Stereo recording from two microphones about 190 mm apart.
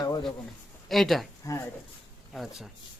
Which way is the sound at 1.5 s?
15° left (ahead or behind).